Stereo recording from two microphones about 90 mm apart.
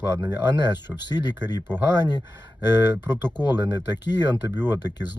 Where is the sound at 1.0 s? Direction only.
55° left (ahead or behind).